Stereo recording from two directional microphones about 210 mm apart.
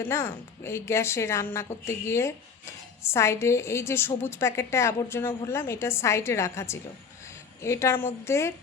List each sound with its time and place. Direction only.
0.1 s a woman's voice: 10° left (ahead or behind)